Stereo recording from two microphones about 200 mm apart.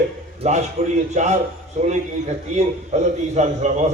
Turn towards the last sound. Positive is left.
turn(degrees=-35)  # may be behind; listen again after turning